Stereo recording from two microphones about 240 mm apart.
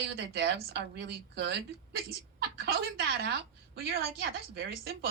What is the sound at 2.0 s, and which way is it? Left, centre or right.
A woman's voice, right.